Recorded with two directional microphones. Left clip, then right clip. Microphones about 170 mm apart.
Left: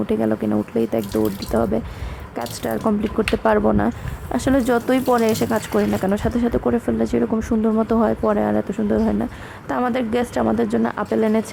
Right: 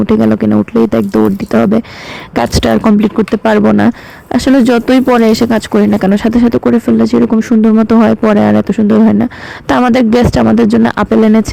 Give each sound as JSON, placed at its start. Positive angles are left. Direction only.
{"t": 0.0, "sound": "speech", "side_deg": -30}
{"t": 3.3, "sound": "speech", "side_deg": -25}